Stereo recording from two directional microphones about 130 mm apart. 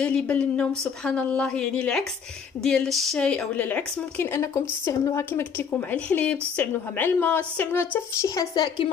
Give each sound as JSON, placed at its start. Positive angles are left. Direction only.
{"t": 0.0, "sound": "a woman's voice", "side_deg": 10}
{"t": 8.5, "sound": "a woman's voice", "side_deg": 35}